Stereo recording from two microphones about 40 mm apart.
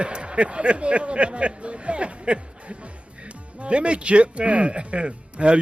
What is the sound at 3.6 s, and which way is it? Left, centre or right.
Speech, right.